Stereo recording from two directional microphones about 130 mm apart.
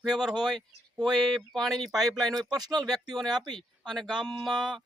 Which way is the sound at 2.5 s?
30° right (ahead or behind).